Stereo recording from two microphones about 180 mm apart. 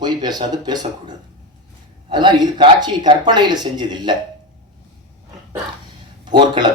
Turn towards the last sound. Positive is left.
turn(degrees=-25)  # may be behind; listen again after turning